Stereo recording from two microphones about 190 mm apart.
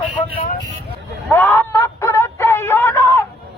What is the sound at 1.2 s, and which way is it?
Wail, 10° left (ahead or behind).